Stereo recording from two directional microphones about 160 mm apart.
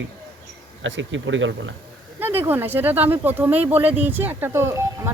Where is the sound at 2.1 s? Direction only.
15° right (ahead or behind).